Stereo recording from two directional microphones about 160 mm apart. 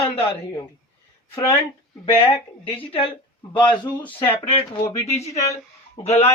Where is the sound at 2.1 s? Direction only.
35° left (ahead or behind).